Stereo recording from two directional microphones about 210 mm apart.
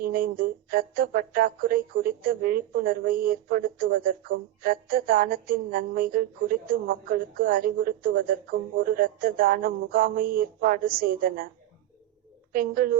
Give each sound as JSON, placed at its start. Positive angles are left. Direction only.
{"t": 0.0, "sound": "speech", "side_deg": -40}
{"t": 12.5, "sound": "speech", "side_deg": -45}